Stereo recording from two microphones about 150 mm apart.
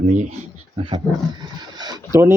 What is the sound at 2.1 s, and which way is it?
Speech, 15° right (ahead or behind).